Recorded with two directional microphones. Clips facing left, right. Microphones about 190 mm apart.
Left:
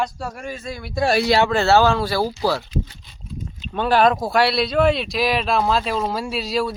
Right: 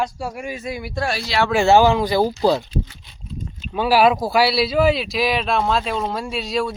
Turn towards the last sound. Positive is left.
turn(degrees=0)  # may be behind; listen again after turning